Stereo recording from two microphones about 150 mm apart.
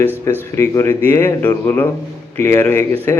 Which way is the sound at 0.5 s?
15° left (ahead or behind).